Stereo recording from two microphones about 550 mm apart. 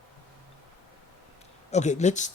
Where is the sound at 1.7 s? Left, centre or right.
Centre.